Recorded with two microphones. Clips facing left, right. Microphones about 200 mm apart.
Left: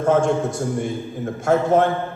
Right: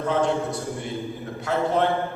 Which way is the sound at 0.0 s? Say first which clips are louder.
Left 5 dB; 45° left (ahead or behind).